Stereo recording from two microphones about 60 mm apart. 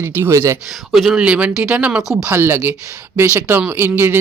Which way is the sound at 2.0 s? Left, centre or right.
Centre.